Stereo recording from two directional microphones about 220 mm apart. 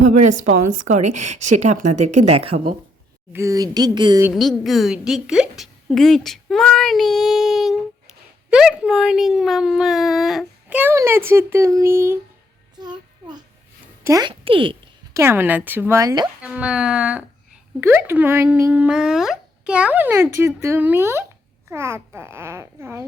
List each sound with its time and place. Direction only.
0.0 s a woman's voice: 35° right (ahead or behind)
3.3 s speech: 15° right (ahead or behind)
4.3 s a woman's voice: centre (ahead or behind)
12.8 s child singing: 20° right (ahead or behind)
14.0 s a sound: 15° right (ahead or behind)
15.2 s speech: 10° right (ahead or behind)
16.4 s speech: 5° right (ahead or behind)